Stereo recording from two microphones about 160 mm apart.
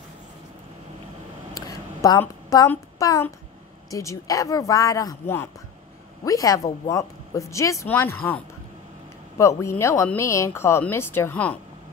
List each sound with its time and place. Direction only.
1.5 s a sound: 20° left (ahead or behind)
3.9 s a woman's voice: 20° left (ahead or behind)
9.4 s speech: 20° left (ahead or behind)